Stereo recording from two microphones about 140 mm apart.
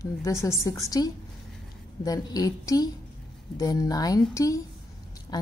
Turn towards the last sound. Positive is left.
turn(degrees=30)  # may be behind; listen again after turning